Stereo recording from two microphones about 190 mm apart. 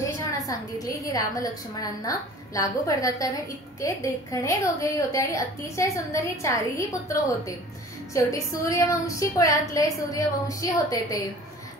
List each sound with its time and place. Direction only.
0.5 s a woman's voice: 20° left (ahead or behind)